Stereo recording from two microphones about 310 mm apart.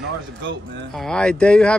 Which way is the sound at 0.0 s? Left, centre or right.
Right.